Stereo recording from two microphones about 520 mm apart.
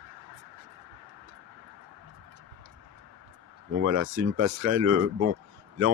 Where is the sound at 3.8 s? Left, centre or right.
Right.